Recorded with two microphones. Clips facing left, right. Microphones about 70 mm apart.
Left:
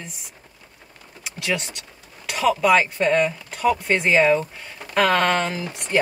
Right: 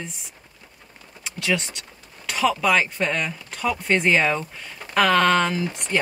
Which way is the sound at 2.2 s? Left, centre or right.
Centre.